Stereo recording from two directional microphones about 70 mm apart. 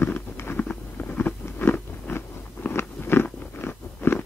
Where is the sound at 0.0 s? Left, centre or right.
Left.